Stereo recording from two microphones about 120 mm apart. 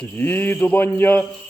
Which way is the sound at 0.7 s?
15° left (ahead or behind).